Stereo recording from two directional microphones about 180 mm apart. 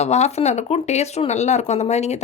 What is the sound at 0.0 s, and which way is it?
Speech, 40° left (ahead or behind).